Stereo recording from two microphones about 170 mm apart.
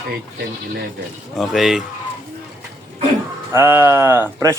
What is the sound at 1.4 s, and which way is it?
Speech, centre (ahead or behind).